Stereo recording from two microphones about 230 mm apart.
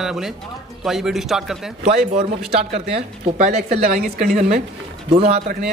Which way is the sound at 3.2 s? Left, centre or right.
Right.